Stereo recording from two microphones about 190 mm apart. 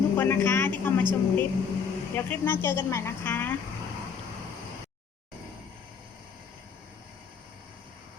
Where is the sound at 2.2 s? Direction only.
10° left (ahead or behind).